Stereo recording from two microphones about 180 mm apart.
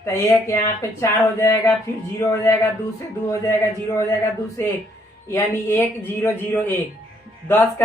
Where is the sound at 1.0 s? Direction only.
15° left (ahead or behind).